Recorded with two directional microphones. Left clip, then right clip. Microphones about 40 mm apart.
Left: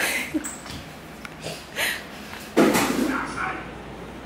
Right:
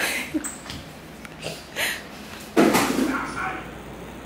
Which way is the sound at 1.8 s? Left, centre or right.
Centre.